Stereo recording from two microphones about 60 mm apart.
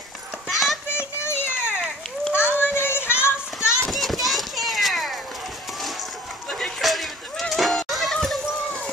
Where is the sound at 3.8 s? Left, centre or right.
Centre.